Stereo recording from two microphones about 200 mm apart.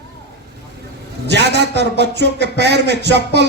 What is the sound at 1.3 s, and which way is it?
A man's voice, 55° right (ahead or behind).